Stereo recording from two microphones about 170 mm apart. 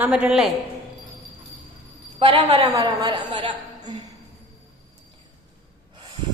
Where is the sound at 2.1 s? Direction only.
35° right (ahead or behind).